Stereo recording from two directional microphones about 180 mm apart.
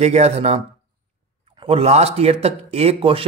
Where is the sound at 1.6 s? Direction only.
35° right (ahead or behind).